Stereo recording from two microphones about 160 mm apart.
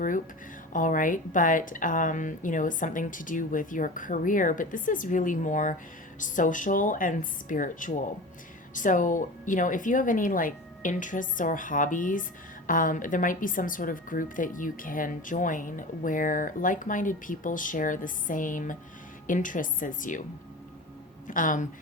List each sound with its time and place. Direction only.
0.7 s speech: 55° left (ahead or behind)
21.2 s speech: 55° left (ahead or behind)